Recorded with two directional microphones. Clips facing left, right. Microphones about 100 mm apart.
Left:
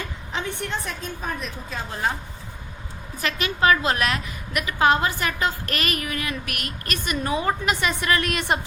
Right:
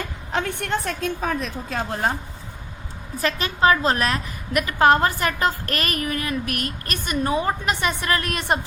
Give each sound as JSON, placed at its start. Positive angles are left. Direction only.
{"t": 0.3, "sound": "a woman's voice", "side_deg": -60}
{"t": 1.9, "sound": "a woman's voice", "side_deg": -40}
{"t": 3.2, "sound": "a woman's voice", "side_deg": -35}